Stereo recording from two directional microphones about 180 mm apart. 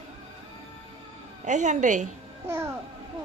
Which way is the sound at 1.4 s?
40° right (ahead or behind).